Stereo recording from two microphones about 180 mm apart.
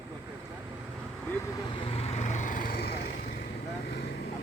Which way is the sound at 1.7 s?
30° left (ahead or behind).